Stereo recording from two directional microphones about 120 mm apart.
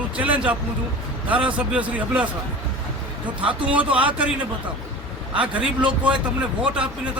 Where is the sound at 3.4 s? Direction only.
10° right (ahead or behind).